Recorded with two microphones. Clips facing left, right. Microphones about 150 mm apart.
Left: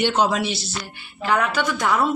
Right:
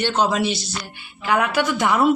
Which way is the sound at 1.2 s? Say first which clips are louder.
Right 1 dB; 5° right (ahead or behind).